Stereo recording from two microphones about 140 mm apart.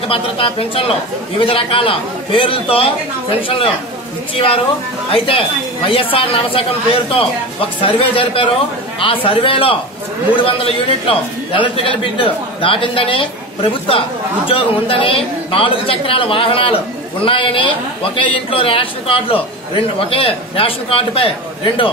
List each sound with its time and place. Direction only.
0.1 s a man's voice: 40° left (ahead or behind)
5.1 s a man's voice: 40° left (ahead or behind)